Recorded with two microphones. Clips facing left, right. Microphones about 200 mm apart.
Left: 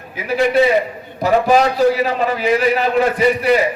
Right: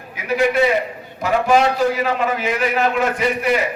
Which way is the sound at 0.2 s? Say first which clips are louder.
Left 2 dB; 30° left (ahead or behind).